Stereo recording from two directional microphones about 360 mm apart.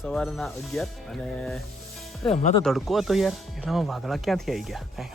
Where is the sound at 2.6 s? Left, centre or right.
Centre.